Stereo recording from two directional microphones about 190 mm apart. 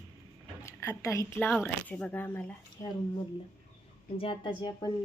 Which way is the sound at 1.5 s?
5° left (ahead or behind).